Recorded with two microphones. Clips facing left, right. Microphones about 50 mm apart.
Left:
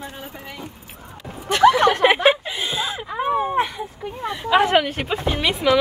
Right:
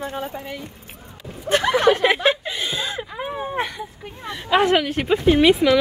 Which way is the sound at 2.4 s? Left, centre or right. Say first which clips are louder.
Left 1 dB; centre.